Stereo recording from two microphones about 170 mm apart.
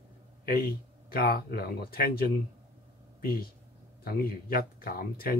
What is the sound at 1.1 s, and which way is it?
Speech, 65° left (ahead or behind).